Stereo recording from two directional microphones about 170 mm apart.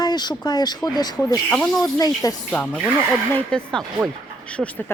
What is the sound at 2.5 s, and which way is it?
Speech, 10° left (ahead or behind).